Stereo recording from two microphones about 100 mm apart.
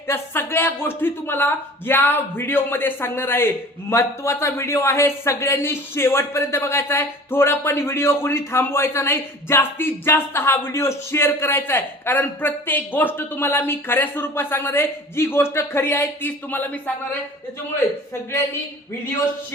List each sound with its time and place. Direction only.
0.1 s a man's voice: 25° left (ahead or behind)